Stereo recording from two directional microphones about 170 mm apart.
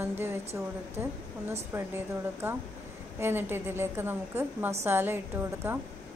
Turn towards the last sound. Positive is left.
turn(degrees=-10)  # may be behind; listen again after turning